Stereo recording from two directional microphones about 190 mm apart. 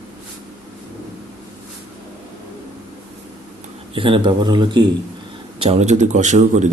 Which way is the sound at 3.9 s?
25° right (ahead or behind).